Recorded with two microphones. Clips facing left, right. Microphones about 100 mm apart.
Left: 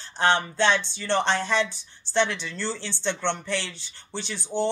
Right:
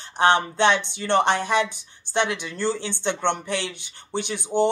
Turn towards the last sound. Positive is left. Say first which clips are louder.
# right 5 dB
turn(degrees=-15)  # may be behind; listen again after turning